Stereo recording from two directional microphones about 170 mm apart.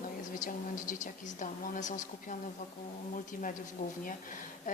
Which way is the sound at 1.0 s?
50° left (ahead or behind).